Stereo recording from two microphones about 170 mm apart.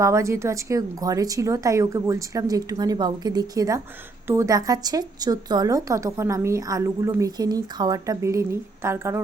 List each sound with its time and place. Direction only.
0.0 s a woman's voice: 15° right (ahead or behind)